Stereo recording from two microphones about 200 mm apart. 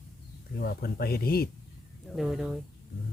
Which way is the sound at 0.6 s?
50° left (ahead or behind).